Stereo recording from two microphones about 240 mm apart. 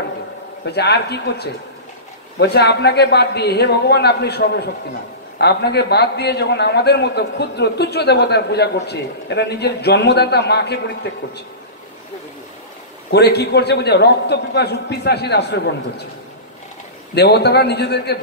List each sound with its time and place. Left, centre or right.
0.7 s a man's voice: left
13.1 s a man's voice: left
17.1 s a man's voice: left